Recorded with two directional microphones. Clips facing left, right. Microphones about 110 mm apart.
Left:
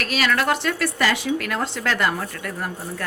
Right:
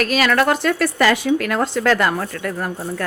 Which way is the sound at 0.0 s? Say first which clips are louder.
Right 5 dB; 50° right (ahead or behind).